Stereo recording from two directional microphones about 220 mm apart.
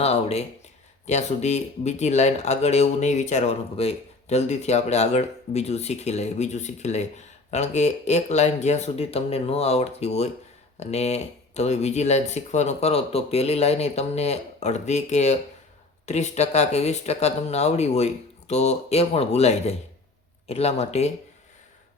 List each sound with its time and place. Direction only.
0.0 s speech: 30° left (ahead or behind)